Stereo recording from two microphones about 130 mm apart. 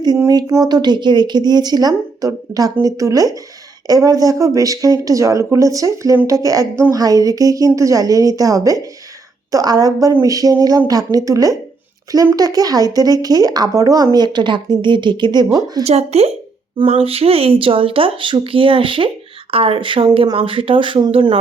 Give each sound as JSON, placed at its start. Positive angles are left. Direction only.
{"t": 0.3, "sound": "speech", "side_deg": -25}
{"t": 15.8, "sound": "speech", "side_deg": -55}